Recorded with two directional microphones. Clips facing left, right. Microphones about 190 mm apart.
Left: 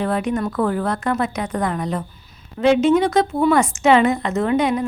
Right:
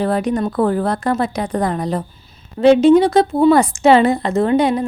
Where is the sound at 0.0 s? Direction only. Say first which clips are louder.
Right 3 dB; 35° right (ahead or behind).